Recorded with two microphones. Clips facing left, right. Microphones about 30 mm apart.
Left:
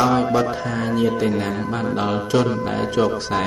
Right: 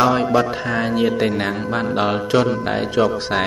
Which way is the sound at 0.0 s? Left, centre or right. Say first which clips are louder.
Right 2 dB; centre.